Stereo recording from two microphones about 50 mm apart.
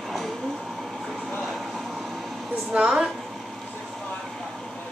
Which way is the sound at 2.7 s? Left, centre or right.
Centre.